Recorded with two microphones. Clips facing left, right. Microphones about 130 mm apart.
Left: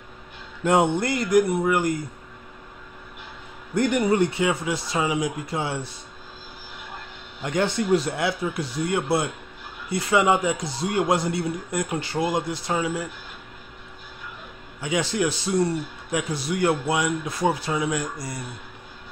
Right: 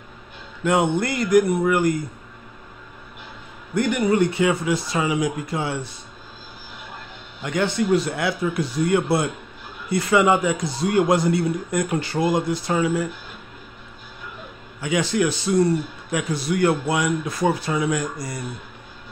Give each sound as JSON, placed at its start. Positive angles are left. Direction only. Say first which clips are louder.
{"t": 0.9, "sound": "a man's voice", "louder": "right 2 dB", "side_deg": 30}
{"t": 3.7, "sound": "a man's voice", "louder": "right 1 dB", "side_deg": 35}
{"t": 7.4, "sound": "a man's voice", "louder": "right 2 dB", "side_deg": 35}
{"t": 14.8, "sound": "a man's voice", "louder": "right 3 dB", "side_deg": 25}